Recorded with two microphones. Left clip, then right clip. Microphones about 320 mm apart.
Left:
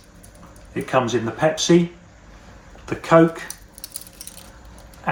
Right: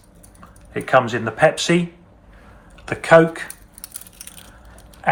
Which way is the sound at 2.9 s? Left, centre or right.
Right.